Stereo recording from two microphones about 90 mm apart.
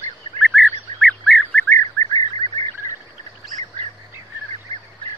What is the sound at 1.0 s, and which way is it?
Bird, 10° left (ahead or behind).